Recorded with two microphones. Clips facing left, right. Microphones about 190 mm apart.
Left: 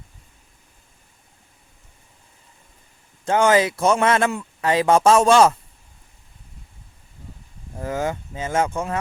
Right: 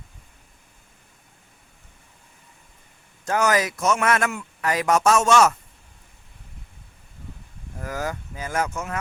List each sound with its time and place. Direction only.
3.2 s speech: 25° left (ahead or behind)
7.8 s speech: 25° left (ahead or behind)